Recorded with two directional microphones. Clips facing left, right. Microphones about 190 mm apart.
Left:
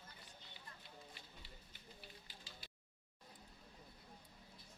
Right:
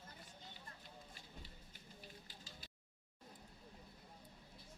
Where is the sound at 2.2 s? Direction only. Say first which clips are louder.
Right 1 dB; 45° right (ahead or behind).